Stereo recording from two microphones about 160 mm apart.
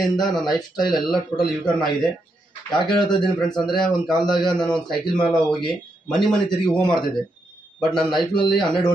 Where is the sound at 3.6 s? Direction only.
Centre (ahead or behind).